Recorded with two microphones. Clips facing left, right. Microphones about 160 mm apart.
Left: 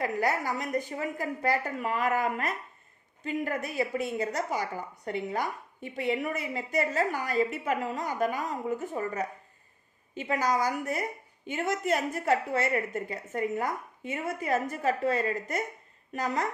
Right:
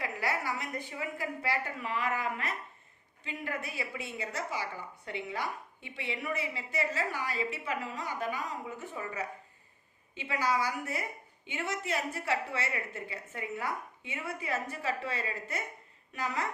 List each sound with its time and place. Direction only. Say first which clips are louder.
0.0 s a woman's voice: left 6 dB; 45° left (ahead or behind)